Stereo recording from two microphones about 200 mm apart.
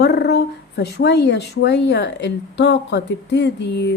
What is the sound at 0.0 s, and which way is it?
Speech, 55° left (ahead or behind).